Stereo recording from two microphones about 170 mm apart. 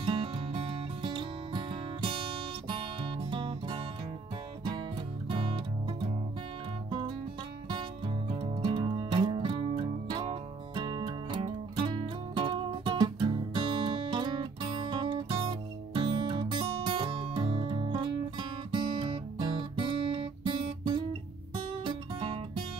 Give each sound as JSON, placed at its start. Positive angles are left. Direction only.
{"t": 0.0, "sound": "music", "side_deg": -30}
{"t": 5.3, "sound": "music", "side_deg": -30}
{"t": 8.3, "sound": "music", "side_deg": -25}